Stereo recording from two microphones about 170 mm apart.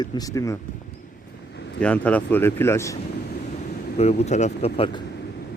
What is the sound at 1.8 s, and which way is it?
Speech, 5° left (ahead or behind).